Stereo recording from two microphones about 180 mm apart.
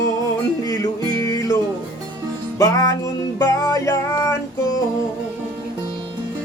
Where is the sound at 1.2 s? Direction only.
15° left (ahead or behind).